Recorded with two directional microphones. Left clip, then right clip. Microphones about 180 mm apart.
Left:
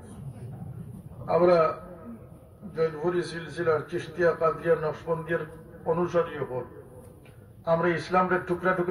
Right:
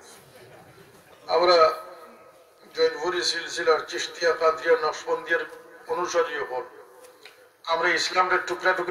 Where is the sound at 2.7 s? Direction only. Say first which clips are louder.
Right 3 dB; 40° left (ahead or behind).